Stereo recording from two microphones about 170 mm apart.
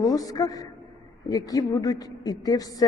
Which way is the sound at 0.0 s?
20° left (ahead or behind).